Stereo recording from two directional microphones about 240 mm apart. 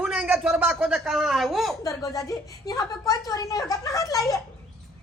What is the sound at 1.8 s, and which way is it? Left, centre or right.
A woman's voice, centre.